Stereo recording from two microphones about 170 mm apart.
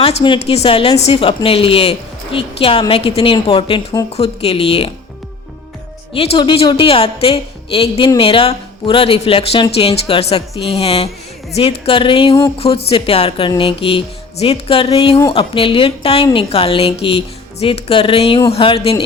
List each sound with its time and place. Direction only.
0.0 s a woman's voice: 35° left (ahead or behind)
6.1 s a woman's voice: 30° left (ahead or behind)